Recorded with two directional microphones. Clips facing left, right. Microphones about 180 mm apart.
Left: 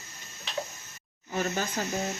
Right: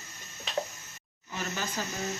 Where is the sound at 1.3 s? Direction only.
45° left (ahead or behind).